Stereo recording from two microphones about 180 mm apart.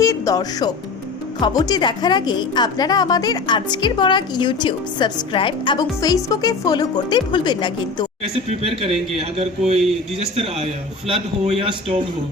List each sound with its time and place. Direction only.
0.0 s a woman's voice: 20° left (ahead or behind)
8.2 s speech: 35° right (ahead or behind)